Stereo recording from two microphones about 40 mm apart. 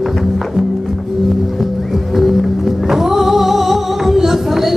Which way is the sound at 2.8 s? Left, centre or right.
Centre.